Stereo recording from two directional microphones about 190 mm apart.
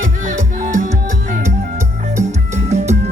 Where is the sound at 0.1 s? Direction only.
40° right (ahead or behind).